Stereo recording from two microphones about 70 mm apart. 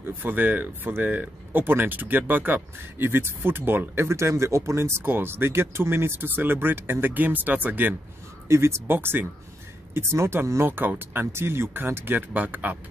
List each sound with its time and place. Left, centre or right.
0.2 s speech: right
8.5 s speech: right
10.7 s speech: right